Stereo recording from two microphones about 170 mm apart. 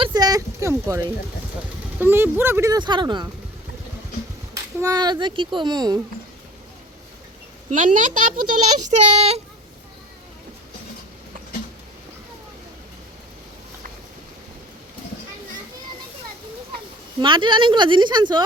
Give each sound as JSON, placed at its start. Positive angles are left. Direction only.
{"t": 0.0, "sound": "a sound", "side_deg": -25}
{"t": 2.0, "sound": "speech", "side_deg": -15}
{"t": 4.5, "sound": "speech", "side_deg": -20}
{"t": 7.7, "sound": "speech", "side_deg": -50}
{"t": 17.2, "sound": "speech", "side_deg": -30}